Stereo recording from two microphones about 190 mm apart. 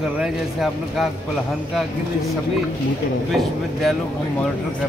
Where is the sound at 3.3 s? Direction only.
Centre (ahead or behind).